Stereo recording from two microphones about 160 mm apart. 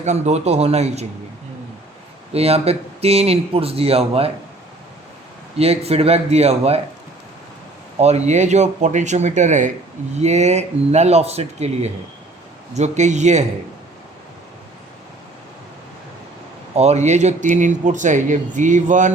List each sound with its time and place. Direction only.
0.0 s speech: 45° right (ahead or behind)
2.3 s speech: 40° right (ahead or behind)
5.5 s speech: 40° right (ahead or behind)
7.9 s speech: 40° right (ahead or behind)
16.7 s speech: 45° right (ahead or behind)